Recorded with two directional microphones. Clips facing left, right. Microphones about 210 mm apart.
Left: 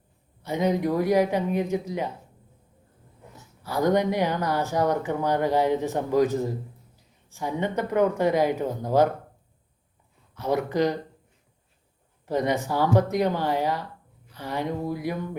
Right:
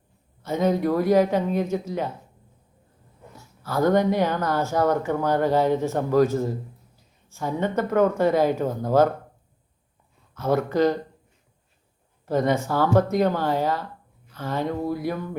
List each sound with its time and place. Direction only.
0.4 s speech: 15° left (ahead or behind)
3.3 s speech: 15° left (ahead or behind)
10.3 s speech: 15° left (ahead or behind)
12.2 s speech: 15° left (ahead or behind)